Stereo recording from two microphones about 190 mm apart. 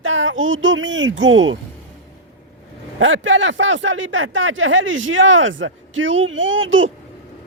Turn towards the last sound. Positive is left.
turn(degrees=-90)